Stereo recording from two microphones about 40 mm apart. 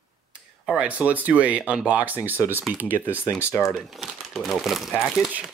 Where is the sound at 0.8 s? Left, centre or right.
Right.